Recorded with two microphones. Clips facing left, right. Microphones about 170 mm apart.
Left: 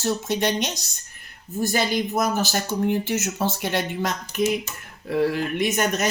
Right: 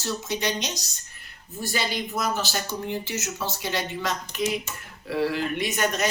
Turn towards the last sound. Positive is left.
turn(degrees=45)  # may be behind; listen again after turning